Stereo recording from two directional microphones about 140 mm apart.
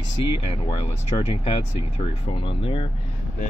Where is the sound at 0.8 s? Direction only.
40° left (ahead or behind).